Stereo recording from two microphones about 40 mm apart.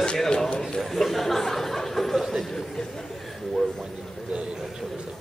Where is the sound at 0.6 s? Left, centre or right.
Centre.